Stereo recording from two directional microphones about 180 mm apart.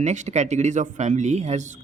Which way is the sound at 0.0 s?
40° right (ahead or behind).